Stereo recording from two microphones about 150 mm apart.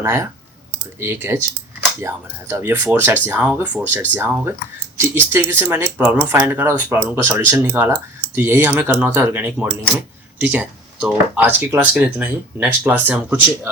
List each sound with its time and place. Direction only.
0.0 s speech: 20° right (ahead or behind)